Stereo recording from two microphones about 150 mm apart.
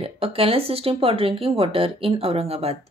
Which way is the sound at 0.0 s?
40° right (ahead or behind).